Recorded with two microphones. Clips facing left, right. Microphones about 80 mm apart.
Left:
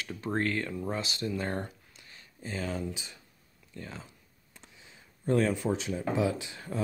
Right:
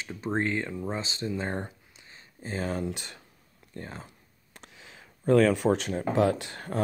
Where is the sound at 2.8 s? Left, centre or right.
Right.